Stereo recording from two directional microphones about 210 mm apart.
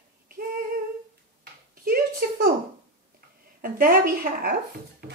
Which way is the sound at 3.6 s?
45° right (ahead or behind).